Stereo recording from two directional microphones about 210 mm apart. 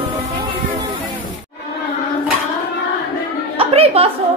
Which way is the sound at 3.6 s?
30° right (ahead or behind).